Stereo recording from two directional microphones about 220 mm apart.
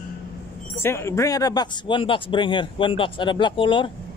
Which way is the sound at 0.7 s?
10° left (ahead or behind).